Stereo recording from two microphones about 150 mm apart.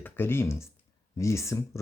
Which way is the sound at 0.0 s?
15° left (ahead or behind).